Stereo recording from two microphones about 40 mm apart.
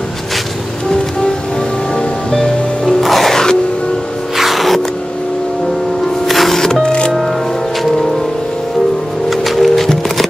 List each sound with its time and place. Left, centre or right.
0.8 s music: centre
4.4 s music: centre
6.2 s music: centre
6.6 s music: centre
9.3 s music: centre